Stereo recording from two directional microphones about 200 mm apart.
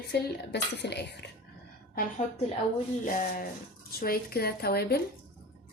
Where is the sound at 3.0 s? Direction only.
40° left (ahead or behind).